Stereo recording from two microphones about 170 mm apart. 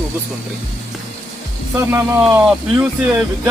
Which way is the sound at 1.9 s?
15° right (ahead or behind).